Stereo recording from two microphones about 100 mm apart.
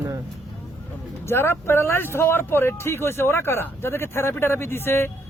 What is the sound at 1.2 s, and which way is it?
Speech, 25° left (ahead or behind).